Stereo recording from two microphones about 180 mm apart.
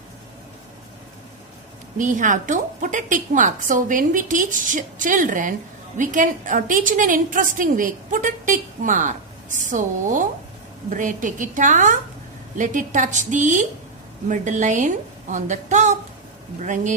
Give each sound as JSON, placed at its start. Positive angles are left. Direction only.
{"t": 2.0, "sound": "a woman's voice", "side_deg": -45}